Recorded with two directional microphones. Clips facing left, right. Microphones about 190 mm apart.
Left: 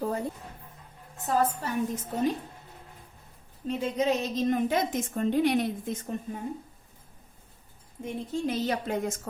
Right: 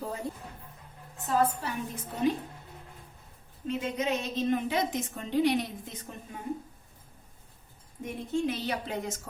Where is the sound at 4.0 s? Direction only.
40° left (ahead or behind).